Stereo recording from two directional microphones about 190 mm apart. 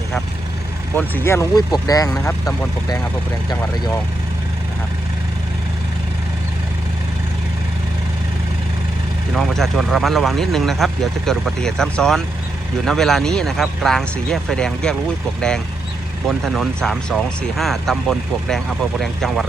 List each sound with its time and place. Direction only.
0.9 s speech: 10° left (ahead or behind)
3.5 s speech: 20° left (ahead or behind)
9.3 s speech: centre (ahead or behind)